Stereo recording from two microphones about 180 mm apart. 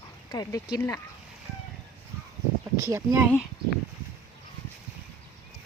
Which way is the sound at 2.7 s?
20° right (ahead or behind).